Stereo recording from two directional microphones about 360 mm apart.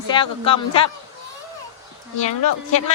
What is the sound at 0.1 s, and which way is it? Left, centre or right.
Speech, centre.